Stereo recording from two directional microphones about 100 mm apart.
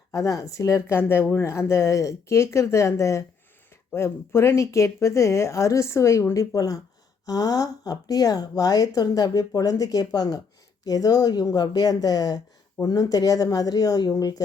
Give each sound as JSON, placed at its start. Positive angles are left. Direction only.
{"t": 0.1, "sound": "speech", "side_deg": 35}